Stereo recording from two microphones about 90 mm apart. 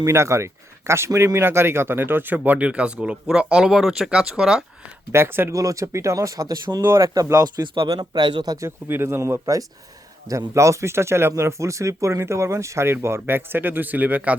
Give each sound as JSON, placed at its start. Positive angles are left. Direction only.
{"t": 0.0, "sound": "speech", "side_deg": -30}
{"t": 5.1, "sound": "speech", "side_deg": -25}
{"t": 5.5, "sound": "speech", "side_deg": -35}
{"t": 7.9, "sound": "speech", "side_deg": -55}
{"t": 8.6, "sound": "speech", "side_deg": -25}